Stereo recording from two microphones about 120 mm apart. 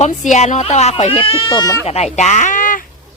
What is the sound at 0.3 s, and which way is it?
Speech, 70° left (ahead or behind).